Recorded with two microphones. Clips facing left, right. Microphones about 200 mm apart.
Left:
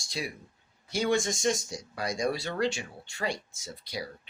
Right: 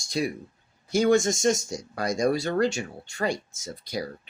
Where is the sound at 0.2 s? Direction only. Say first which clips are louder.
Right 9 dB; 50° right (ahead or behind).